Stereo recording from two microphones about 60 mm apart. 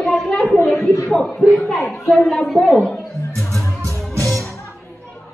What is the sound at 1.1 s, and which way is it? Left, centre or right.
Speech, centre.